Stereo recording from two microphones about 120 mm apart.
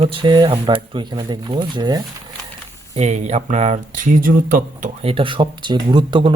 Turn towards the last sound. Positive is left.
turn(degrees=-40)  # may be behind; listen again after turning